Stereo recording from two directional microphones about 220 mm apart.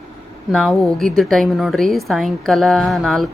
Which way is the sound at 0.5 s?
Centre (ahead or behind).